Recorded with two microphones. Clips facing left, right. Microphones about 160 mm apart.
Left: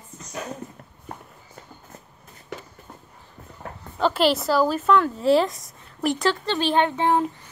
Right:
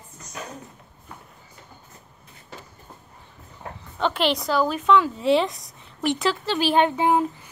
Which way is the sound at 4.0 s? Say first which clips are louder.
Left 3 dB; 5° left (ahead or behind).